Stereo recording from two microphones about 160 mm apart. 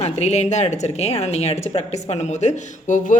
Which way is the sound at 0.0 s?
45° left (ahead or behind).